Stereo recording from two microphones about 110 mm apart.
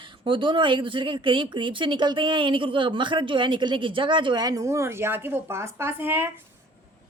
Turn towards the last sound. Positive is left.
turn(degrees=-20)  # may be behind; listen again after turning